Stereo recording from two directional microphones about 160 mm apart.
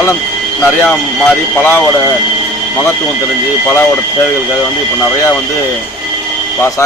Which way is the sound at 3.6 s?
15° left (ahead or behind).